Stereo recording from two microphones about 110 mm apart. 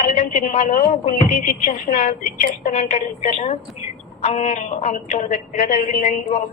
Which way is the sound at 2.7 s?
90° left.